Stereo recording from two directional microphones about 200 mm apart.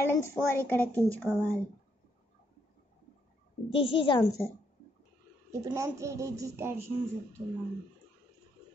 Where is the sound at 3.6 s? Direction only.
25° left (ahead or behind).